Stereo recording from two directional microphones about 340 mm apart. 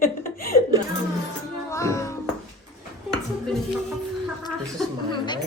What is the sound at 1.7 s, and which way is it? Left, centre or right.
Music, centre.